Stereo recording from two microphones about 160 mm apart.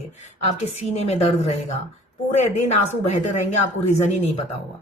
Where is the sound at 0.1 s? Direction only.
45° left (ahead or behind).